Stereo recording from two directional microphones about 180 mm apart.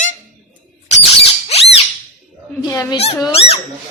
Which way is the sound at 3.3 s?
35° left (ahead or behind).